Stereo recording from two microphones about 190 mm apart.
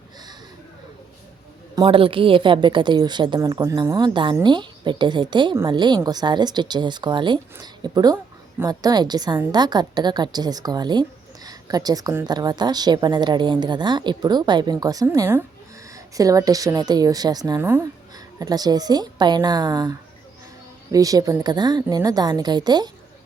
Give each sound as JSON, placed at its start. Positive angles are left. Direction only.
{"t": 1.7, "sound": "speech", "side_deg": -25}